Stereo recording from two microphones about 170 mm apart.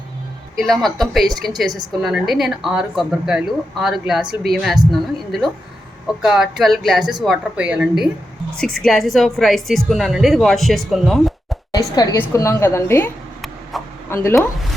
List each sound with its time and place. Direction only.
0.6 s a woman's voice: centre (ahead or behind)
11.7 s a woman's voice: 20° left (ahead or behind)
13.7 s a sound: centre (ahead or behind)
14.1 s a woman's voice: 15° left (ahead or behind)